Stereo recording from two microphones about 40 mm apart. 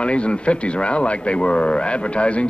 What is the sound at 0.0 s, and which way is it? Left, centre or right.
Speech, left.